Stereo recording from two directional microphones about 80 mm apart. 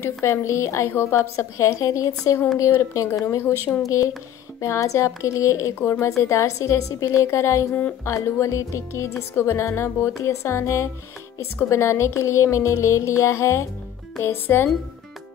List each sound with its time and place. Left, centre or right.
0.2 s a woman's voice: left